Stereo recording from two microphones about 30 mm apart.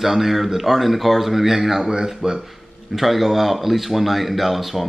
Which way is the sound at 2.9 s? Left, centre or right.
Centre.